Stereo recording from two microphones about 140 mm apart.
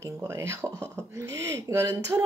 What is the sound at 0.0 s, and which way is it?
Speech, 20° right (ahead or behind).